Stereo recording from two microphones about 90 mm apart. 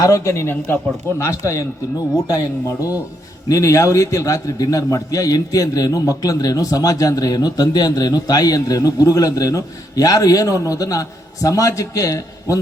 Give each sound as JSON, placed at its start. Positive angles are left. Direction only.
{"t": 0.0, "sound": "a man's voice", "side_deg": 35}
{"t": 1.2, "sound": "a man's voice", "side_deg": 35}